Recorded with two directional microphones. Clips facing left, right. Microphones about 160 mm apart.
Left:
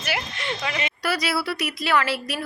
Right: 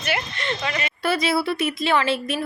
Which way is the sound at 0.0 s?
5° left (ahead or behind).